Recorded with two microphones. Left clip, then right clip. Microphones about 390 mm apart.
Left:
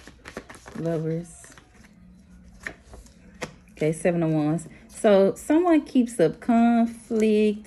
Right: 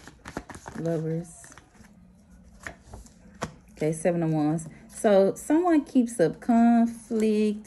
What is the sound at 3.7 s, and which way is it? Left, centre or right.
Speech, left.